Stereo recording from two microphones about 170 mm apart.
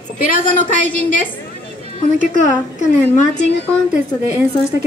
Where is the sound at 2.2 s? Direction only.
45° left (ahead or behind).